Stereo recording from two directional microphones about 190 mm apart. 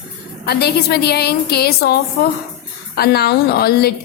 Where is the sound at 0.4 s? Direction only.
60° left (ahead or behind).